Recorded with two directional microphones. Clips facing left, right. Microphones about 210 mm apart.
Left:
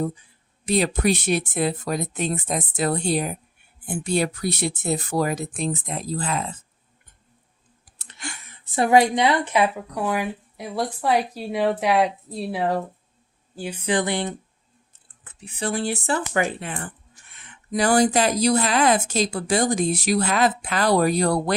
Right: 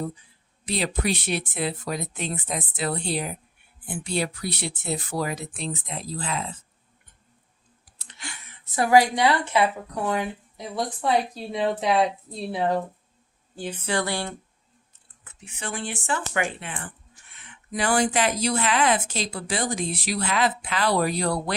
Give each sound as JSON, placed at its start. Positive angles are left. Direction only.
{"t": 0.6, "sound": "speech", "side_deg": 45}
{"t": 7.9, "sound": "a sound", "side_deg": 50}
{"t": 8.6, "sound": "speech", "side_deg": 25}
{"t": 11.3, "sound": "speech", "side_deg": 5}
{"t": 15.2, "sound": "speech", "side_deg": 35}